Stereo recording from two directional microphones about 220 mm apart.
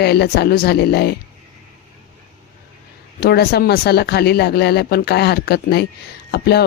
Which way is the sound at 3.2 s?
45° left (ahead or behind).